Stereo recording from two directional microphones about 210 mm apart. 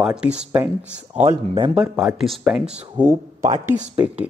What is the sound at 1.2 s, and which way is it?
Speech, 30° right (ahead or behind).